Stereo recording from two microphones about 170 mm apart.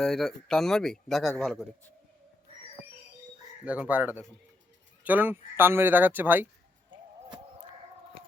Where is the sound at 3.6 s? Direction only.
10° right (ahead or behind).